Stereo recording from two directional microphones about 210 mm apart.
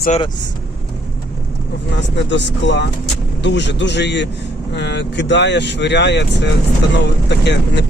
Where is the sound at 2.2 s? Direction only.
55° left (ahead or behind).